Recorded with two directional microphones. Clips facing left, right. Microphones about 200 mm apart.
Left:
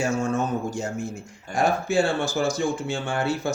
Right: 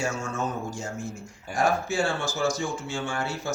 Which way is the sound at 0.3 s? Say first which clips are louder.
Left 5 dB; 60° left (ahead or behind).